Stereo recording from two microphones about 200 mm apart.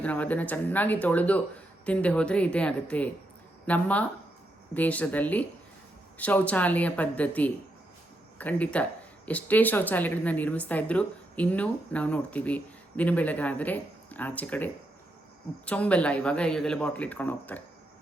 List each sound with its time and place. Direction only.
0.0 s speech: 5° left (ahead or behind)